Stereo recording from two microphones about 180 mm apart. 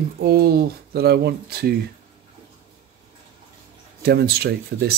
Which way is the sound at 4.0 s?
65° right (ahead or behind).